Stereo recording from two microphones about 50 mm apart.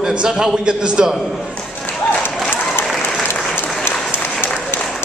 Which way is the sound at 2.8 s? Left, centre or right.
Centre.